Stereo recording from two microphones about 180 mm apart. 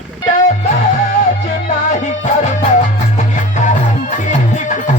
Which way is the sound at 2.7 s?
45° left (ahead or behind).